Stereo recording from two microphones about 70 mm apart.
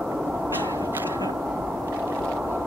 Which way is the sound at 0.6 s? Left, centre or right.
Right.